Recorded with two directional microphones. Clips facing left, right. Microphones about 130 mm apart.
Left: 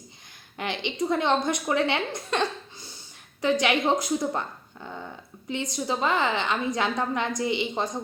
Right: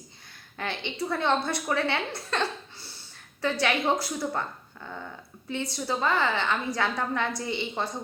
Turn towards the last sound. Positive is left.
turn(degrees=15)  # may be behind; listen again after turning